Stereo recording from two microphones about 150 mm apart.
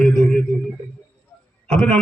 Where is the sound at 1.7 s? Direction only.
5° left (ahead or behind).